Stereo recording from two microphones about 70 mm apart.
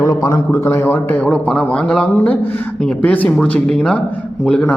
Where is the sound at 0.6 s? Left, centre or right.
Left.